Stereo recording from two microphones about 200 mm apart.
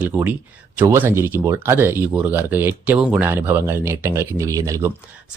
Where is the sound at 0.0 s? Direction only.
10° right (ahead or behind).